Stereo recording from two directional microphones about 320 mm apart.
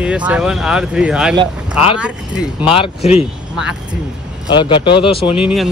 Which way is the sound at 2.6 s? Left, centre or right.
Centre.